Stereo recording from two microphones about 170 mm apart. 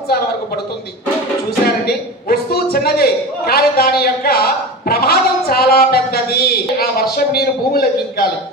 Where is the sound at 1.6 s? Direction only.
65° left (ahead or behind).